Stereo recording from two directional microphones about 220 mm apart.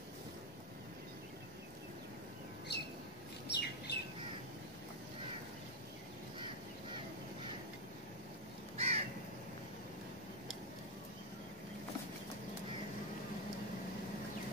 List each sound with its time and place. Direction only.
2.7 s a sound: 50° left (ahead or behind)
3.4 s bird: 50° left (ahead or behind)
8.7 s crow: 25° right (ahead or behind)